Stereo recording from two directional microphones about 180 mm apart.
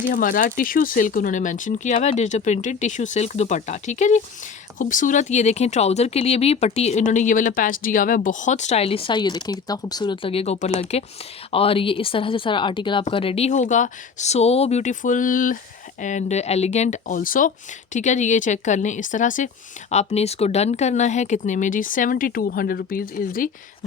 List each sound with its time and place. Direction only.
0.1 s speech: 50° left (ahead or behind)